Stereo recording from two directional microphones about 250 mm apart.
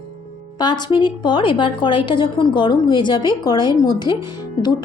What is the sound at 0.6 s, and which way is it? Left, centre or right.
A woman's voice, centre.